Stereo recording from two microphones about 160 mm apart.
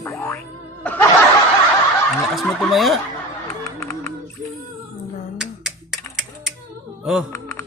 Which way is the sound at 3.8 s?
15° left (ahead or behind).